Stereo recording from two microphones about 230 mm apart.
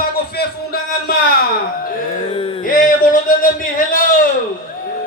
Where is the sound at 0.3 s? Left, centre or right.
Left.